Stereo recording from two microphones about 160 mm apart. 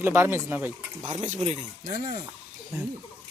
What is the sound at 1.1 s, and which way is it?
Speech, 45° right (ahead or behind).